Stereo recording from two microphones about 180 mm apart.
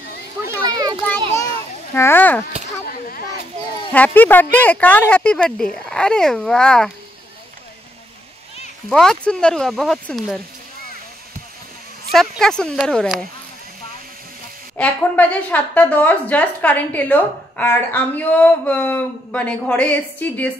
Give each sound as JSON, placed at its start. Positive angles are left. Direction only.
{"t": 0.5, "sound": "a sound", "side_deg": -20}
{"t": 2.0, "sound": "a woman's voice", "side_deg": 10}
{"t": 2.9, "sound": "a sound", "side_deg": 50}
{"t": 3.9, "sound": "a woman's voice", "side_deg": 10}
{"t": 8.8, "sound": "speech", "side_deg": 5}
{"t": 12.1, "sound": "speech", "side_deg": 0}
{"t": 14.8, "sound": "a woman's voice", "side_deg": 10}